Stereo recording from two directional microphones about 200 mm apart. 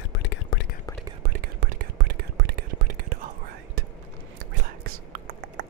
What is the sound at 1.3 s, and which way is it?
Whispering, 45° right (ahead or behind).